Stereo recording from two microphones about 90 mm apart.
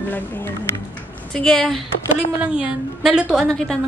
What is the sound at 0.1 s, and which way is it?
Speech, 20° left (ahead or behind).